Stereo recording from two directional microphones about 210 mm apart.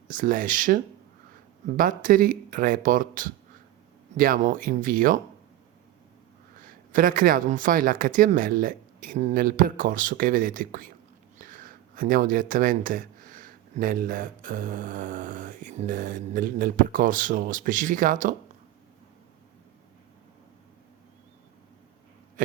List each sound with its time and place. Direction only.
0.1 s speech: 40° right (ahead or behind)
6.6 s speech: 40° right (ahead or behind)